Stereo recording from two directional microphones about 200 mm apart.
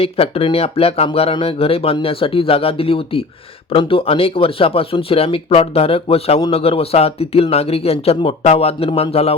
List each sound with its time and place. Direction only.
0.0 s speech: 30° left (ahead or behind)